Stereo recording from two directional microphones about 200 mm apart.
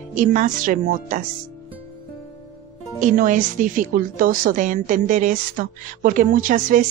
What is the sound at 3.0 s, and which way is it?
A woman's voice, 40° right (ahead or behind).